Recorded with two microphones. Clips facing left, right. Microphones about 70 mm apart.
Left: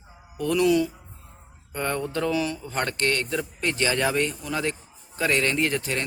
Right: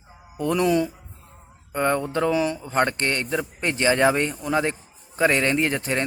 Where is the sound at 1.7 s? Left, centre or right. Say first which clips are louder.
Right 5 dB; centre.